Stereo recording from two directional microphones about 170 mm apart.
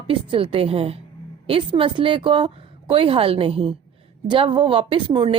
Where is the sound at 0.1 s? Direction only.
30° right (ahead or behind).